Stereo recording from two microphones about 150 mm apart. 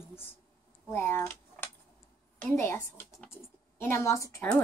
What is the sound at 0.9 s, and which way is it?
Speech, 15° left (ahead or behind).